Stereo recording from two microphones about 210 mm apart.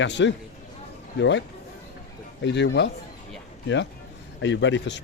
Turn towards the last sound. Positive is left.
turn(degrees=60)  # may be behind; listen again after turning